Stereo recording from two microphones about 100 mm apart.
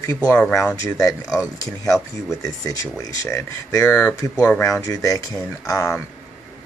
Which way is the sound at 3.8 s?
15° left (ahead or behind).